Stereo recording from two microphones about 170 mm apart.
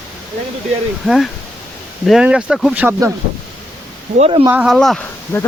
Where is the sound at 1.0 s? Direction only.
Centre (ahead or behind).